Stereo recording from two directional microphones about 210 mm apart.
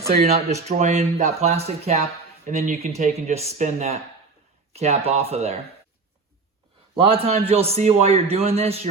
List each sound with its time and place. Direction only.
0.2 s a man's voice: 30° right (ahead or behind)
6.9 s a man's voice: 25° right (ahead or behind)